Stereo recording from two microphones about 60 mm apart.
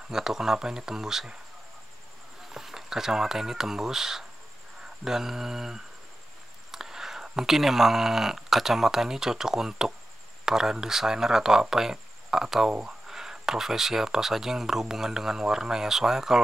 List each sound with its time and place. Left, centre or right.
0.1 s speech: centre
2.5 s speech: centre